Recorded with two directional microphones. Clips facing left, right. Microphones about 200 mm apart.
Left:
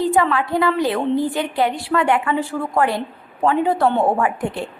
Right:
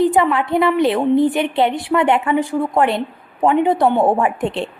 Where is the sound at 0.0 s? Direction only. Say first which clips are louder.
Right 3 dB; 20° right (ahead or behind).